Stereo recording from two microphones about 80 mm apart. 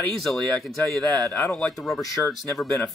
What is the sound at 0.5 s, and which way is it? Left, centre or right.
Speech, centre.